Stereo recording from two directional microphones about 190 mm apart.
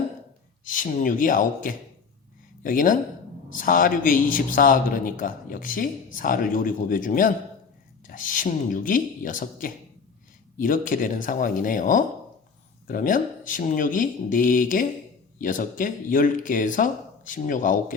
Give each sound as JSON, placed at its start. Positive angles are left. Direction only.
{"t": 0.6, "sound": "a man's voice", "side_deg": 45}